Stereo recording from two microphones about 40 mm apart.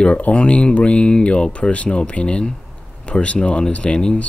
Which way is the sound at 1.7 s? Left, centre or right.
Left.